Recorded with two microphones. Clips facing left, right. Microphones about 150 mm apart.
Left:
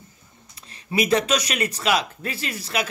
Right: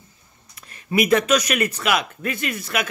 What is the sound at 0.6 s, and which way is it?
Speech, 30° left (ahead or behind).